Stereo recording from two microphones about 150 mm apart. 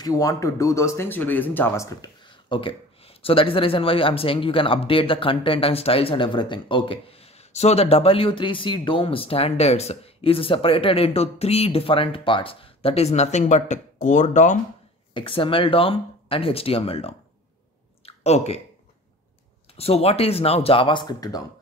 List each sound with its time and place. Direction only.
0.0 s speech: 25° left (ahead or behind)
2.0 s speech: 35° left (ahead or behind); by 14.6 s 55° left (ahead or behind)
15.1 s speech: 35° left (ahead or behind)
18.0 s a sound: 45° left (ahead or behind)
19.8 s speech: 40° left (ahead or behind); by 21.4 s 25° left (ahead or behind)